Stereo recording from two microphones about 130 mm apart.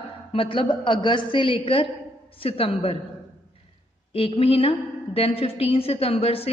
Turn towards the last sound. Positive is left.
turn(degrees=50)  # may be behind; listen again after turning